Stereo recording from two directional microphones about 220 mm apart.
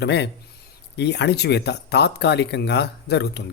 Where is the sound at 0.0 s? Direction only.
50° left (ahead or behind).